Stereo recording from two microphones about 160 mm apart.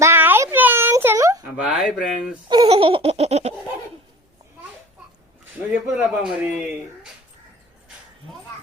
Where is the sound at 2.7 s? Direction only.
35° right (ahead or behind).